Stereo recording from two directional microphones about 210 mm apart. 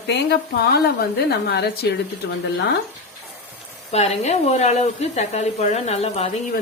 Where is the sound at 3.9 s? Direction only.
30° left (ahead or behind).